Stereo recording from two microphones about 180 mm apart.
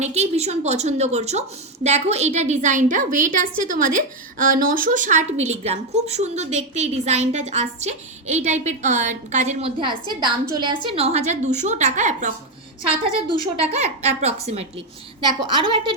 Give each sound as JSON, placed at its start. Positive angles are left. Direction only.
{"t": 0.0, "sound": "a woman's voice", "side_deg": -35}
{"t": 13.4, "sound": "a woman's voice", "side_deg": -40}